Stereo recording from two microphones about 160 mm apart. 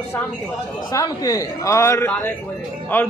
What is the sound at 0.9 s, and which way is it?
Speech, 20° left (ahead or behind).